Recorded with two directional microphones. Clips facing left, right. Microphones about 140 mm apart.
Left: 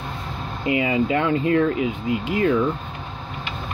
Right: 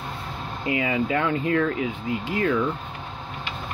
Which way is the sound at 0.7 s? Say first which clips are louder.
Left 4 dB; 20° left (ahead or behind).